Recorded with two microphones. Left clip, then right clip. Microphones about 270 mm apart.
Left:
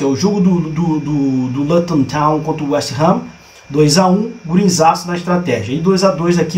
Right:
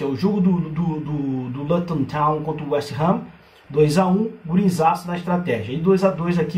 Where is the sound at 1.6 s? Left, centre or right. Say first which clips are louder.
Left 8 dB; centre.